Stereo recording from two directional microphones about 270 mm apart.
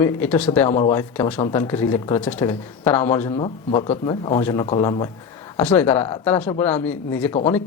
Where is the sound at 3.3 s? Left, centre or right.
Centre.